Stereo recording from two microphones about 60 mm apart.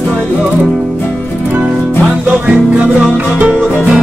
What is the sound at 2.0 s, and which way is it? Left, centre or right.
Music, centre.